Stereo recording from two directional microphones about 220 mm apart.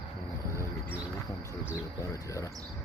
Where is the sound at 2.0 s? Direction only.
15° left (ahead or behind).